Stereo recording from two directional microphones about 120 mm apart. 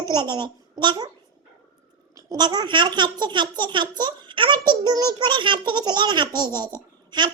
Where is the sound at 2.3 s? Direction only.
35° right (ahead or behind).